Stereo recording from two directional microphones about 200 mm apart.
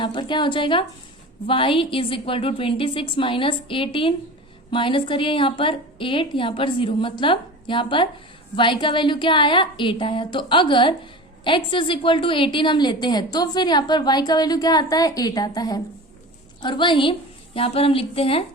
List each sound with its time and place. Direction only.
0.0 s a woman's voice: 25° left (ahead or behind)